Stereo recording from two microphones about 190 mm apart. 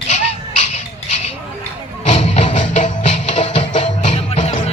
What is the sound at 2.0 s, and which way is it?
Music, 30° left (ahead or behind).